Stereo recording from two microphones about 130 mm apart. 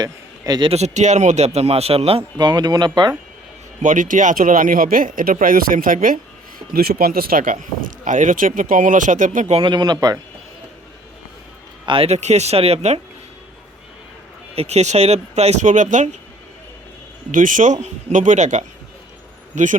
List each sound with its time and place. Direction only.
0.0 s a sound: 30° right (ahead or behind)
0.7 s speech: 60° right (ahead or behind)
2.4 s speech: 30° right (ahead or behind)
3.8 s speech: 90° right
6.6 s speech: 35° right (ahead or behind)
7.3 s speech: 90° right; by 9.6 s 75° right (ahead or behind)
9.6 s speech: 35° right (ahead or behind)
11.9 s speech: 50° right (ahead or behind)
14.5 s speech: 55° right (ahead or behind); by 16.0 s 70° right (ahead or behind)
17.3 s speech: 90° right; by 19.7 s 70° right (ahead or behind)